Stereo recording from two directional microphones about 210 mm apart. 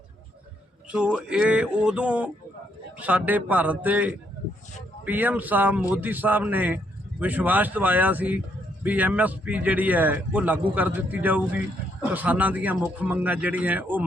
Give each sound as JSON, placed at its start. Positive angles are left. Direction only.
{"t": 0.9, "sound": "speech", "side_deg": -5}